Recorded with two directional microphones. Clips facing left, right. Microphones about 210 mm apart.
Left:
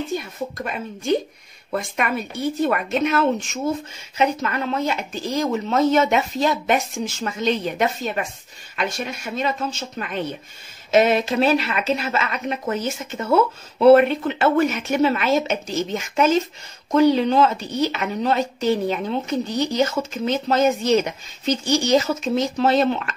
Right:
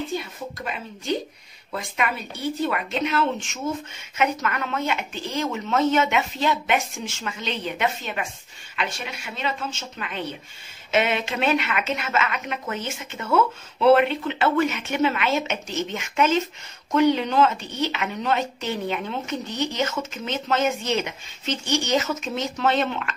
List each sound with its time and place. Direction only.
0.1 s speech: 45° left (ahead or behind)
4.2 s a woman's voice: 30° left (ahead or behind)